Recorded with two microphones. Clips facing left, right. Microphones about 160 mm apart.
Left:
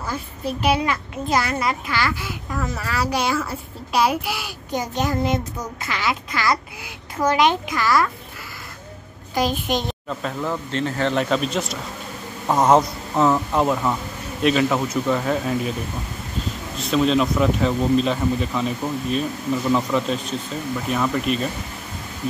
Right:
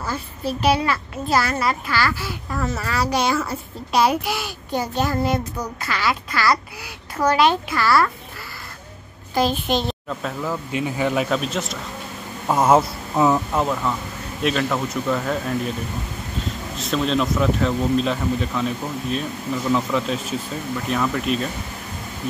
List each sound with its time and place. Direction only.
0.7 s a child's voice: 20° left (ahead or behind)
2.8 s a child's voice: 10° left (ahead or behind)
9.3 s a child's voice: 15° left (ahead or behind)
10.0 s speech: centre (ahead or behind)
16.7 s speech: centre (ahead or behind)